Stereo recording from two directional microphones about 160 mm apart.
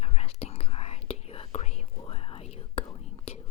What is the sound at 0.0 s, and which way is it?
Whispering, 40° left (ahead or behind).